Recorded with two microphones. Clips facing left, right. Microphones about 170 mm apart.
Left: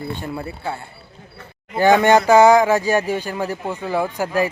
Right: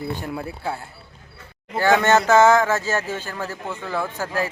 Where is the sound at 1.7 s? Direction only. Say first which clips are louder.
Left 4 dB; 15° left (ahead or behind).